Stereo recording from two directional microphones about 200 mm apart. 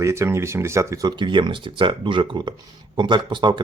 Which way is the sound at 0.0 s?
15° right (ahead or behind).